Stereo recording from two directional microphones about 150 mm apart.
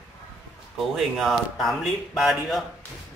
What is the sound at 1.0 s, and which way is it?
Speech, centre (ahead or behind).